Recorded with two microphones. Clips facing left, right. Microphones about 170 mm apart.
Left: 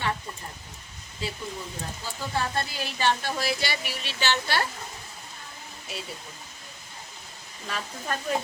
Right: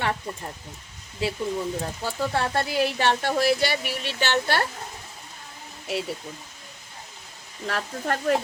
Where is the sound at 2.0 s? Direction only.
75° right (ahead or behind); by 4.6 s 55° right (ahead or behind).